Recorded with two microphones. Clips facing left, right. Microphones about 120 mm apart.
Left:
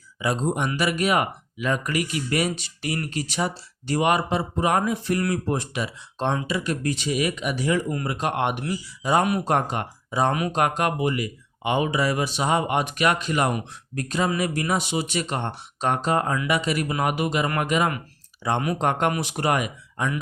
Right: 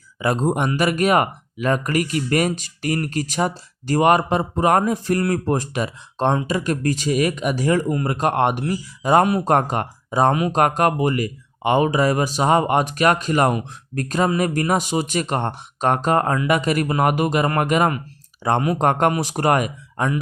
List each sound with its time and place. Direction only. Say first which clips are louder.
0.2 s speech: right 4 dB; 50° right (ahead or behind)